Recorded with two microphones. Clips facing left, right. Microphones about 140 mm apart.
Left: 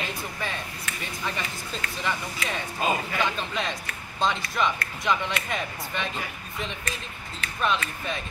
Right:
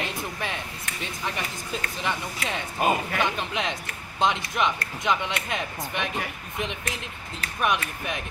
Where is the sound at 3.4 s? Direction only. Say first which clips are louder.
Right 1 dB; 20° right (ahead or behind).